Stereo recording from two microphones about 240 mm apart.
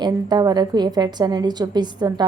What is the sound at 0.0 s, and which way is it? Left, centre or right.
A woman's voice, centre.